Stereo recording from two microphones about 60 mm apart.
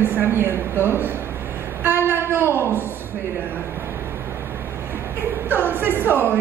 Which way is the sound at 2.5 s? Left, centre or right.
Right.